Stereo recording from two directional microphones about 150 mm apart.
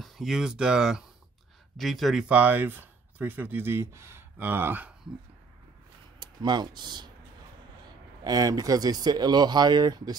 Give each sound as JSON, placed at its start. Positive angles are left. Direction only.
{"t": 0.0, "sound": "speech", "side_deg": -5}
{"t": 6.1, "sound": "speech", "side_deg": -30}
{"t": 8.2, "sound": "speech", "side_deg": -25}